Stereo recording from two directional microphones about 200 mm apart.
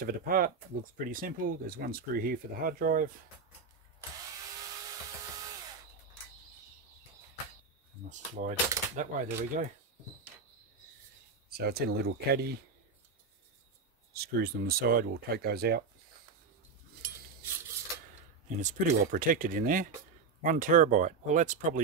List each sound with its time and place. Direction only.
0.0 s speech: 45° right (ahead or behind)
8.1 s speech: 40° right (ahead or behind)
11.5 s speech: 50° right (ahead or behind)
14.1 s speech: 50° right (ahead or behind)
18.6 s speech: 40° right (ahead or behind)